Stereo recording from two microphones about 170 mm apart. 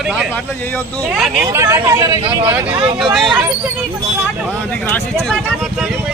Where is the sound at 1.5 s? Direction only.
15° right (ahead or behind).